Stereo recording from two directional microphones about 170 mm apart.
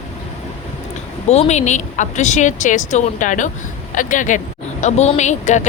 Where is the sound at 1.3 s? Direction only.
40° left (ahead or behind).